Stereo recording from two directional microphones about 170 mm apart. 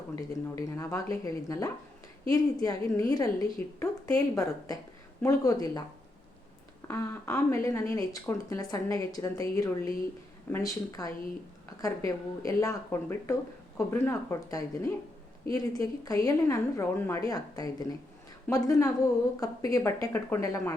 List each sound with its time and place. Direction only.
0.2 s a woman's voice: 20° left (ahead or behind)
6.8 s a woman's voice: 15° left (ahead or behind)